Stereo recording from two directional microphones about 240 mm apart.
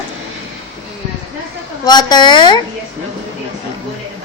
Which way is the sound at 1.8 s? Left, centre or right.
Centre.